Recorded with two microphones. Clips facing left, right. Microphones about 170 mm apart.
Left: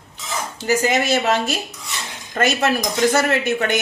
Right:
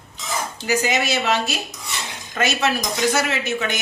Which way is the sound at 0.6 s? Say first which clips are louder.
Left 3 dB; 50° left (ahead or behind).